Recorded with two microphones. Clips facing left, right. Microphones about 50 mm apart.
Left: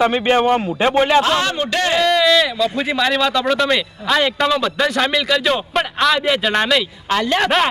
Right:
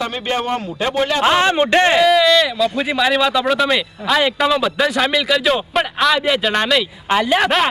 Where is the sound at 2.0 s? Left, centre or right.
Centre.